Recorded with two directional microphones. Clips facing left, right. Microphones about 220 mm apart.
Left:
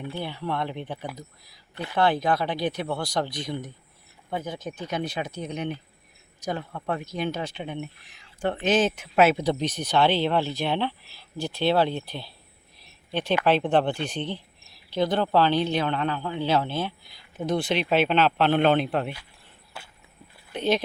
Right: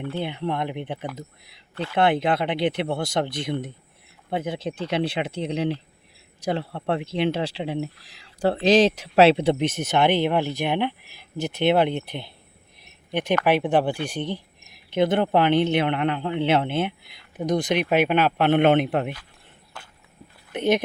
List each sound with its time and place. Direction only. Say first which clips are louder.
0.2 s speech: right 3 dB; 20° right (ahead or behind)
2.0 s a man's voice: right 2 dB; 25° right (ahead or behind)
19.7 s walk: even; 10° left (ahead or behind)
20.5 s speech: right 3 dB; 20° right (ahead or behind)